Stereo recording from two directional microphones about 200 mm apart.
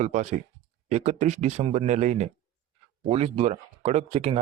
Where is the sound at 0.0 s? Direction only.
35° right (ahead or behind).